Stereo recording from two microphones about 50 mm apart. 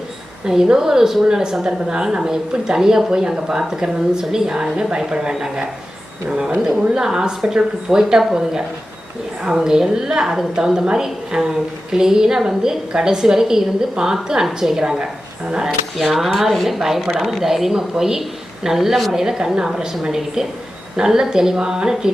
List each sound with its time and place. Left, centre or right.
0.4 s a woman's voice: centre
16.0 s a woman's voice: centre